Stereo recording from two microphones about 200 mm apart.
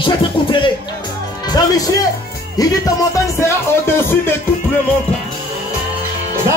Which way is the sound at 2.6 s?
20° left (ahead or behind).